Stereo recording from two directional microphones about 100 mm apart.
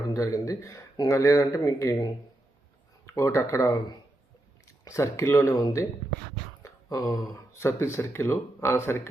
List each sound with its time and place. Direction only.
0.1 s speech: 35° left (ahead or behind)
3.1 s speech: 30° left (ahead or behind)
5.5 s speech: 40° left (ahead or behind)
6.6 s a sound: 35° left (ahead or behind)
7.5 s speech: 30° left (ahead or behind)